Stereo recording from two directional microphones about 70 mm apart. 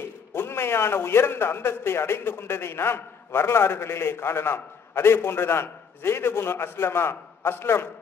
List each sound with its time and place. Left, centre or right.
0.3 s a man's voice: left